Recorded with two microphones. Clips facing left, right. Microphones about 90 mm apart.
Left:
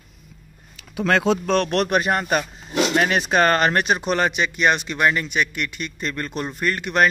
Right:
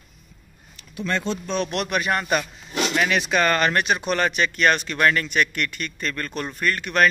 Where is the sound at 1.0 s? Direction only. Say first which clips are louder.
Left 7 dB; 90° left.